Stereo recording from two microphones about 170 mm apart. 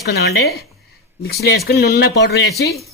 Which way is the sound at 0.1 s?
75° left (ahead or behind).